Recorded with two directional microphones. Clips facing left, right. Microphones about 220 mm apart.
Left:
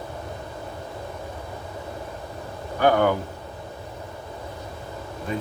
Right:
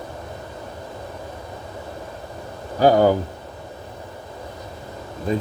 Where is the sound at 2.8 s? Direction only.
35° right (ahead or behind).